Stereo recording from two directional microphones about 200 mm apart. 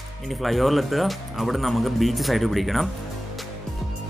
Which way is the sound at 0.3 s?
Centre (ahead or behind).